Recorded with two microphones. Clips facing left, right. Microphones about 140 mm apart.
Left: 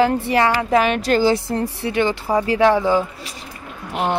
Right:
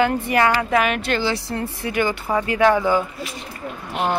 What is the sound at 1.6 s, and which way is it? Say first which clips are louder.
Speech: left 3 dB; 30° left (ahead or behind).